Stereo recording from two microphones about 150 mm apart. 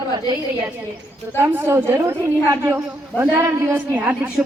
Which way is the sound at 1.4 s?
15° right (ahead or behind).